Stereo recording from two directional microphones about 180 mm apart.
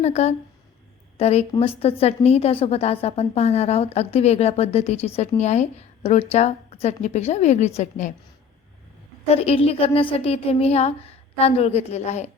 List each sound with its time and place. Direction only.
0.0 s a woman's voice: 35° left (ahead or behind)
9.3 s a woman's voice: 35° left (ahead or behind)